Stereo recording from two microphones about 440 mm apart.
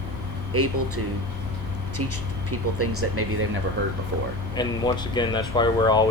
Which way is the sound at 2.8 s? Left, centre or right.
Right.